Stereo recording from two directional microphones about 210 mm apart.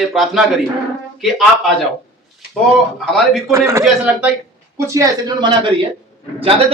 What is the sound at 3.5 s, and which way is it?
A man's voice, 15° right (ahead or behind).